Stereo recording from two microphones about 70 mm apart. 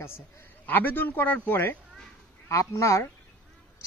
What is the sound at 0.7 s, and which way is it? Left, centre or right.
A man's voice, left.